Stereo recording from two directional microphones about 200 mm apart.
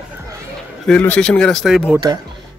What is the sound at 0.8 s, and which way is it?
Speech, 5° left (ahead or behind).